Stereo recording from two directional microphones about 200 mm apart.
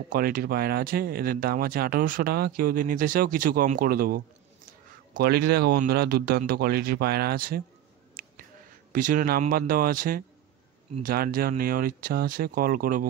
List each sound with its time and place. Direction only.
0.1 s speech: 45° right (ahead or behind)
8.1 s a sound: 45° right (ahead or behind)
8.9 s speech: 45° right (ahead or behind)